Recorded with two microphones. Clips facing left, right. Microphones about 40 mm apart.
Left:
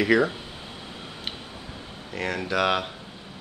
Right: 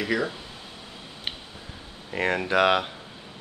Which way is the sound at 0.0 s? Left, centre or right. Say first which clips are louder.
Left 6 dB; left.